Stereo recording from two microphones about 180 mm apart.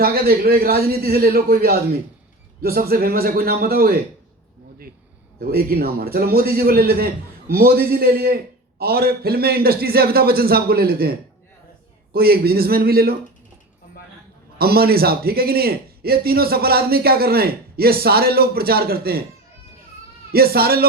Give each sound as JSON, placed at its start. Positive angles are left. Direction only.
{"t": 0.0, "sound": "a man's voice", "side_deg": -60}
{"t": 5.4, "sound": "a man's voice", "side_deg": -55}
{"t": 14.6, "sound": "a man's voice", "side_deg": -60}
{"t": 20.3, "sound": "a man's voice", "side_deg": -60}